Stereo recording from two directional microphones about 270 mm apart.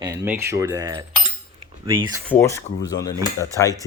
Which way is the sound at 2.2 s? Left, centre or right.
Centre.